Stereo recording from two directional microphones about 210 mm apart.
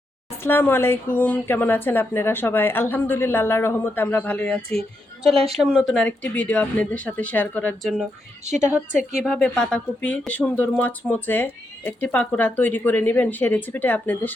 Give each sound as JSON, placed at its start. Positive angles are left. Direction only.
{"t": 0.4, "sound": "speech", "side_deg": 10}
{"t": 5.3, "sound": "speech", "side_deg": -25}
{"t": 5.5, "sound": "speech", "side_deg": 0}
{"t": 8.4, "sound": "a woman's voice", "side_deg": -35}
{"t": 9.2, "sound": "speech", "side_deg": 0}